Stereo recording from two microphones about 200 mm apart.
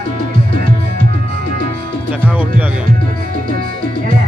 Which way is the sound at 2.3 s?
5° right (ahead or behind).